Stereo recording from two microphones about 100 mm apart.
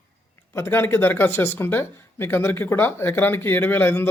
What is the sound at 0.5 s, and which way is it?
Speech, 25° left (ahead or behind).